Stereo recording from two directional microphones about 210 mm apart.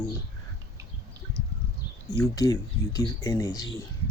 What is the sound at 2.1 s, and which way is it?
Speech, 15° left (ahead or behind).